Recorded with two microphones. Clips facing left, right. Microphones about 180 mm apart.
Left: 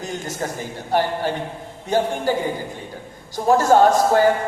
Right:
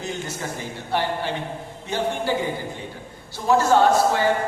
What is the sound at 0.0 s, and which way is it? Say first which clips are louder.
Speech: left 3 dB; 45° left (ahead or behind).